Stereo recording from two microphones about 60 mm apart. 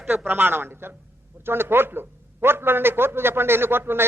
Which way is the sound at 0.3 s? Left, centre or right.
Right.